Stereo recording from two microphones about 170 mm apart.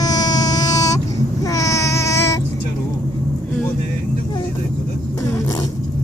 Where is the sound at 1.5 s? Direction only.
20° left (ahead or behind).